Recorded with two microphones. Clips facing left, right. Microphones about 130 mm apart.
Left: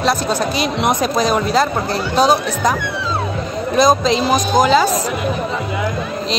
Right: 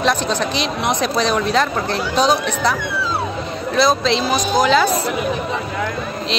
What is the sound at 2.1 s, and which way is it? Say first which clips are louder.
Speech: left 3 dB; 40° left (ahead or behind).